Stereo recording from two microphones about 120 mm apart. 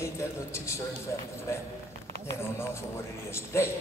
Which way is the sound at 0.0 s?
25° left (ahead or behind).